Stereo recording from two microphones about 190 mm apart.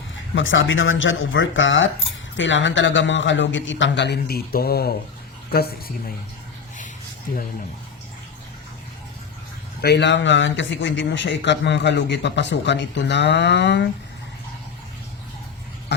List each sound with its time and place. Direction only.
0.3 s a woman's voice: 90° left; by 6.1 s 55° left (ahead or behind)
9.8 s speech: 65° left (ahead or behind)